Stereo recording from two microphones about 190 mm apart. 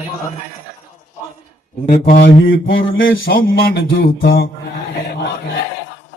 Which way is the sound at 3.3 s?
55° left (ahead or behind).